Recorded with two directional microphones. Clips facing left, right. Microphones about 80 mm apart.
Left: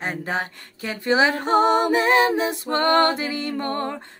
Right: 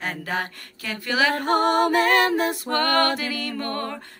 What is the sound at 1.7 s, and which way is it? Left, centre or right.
Music, right.